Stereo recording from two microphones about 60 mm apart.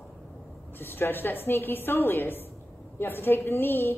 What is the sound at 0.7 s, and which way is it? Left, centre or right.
A woman's voice, left.